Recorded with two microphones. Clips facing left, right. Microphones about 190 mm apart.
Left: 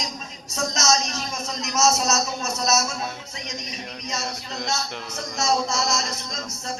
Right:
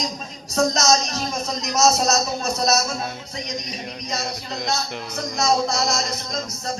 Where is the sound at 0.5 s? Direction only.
35° right (ahead or behind).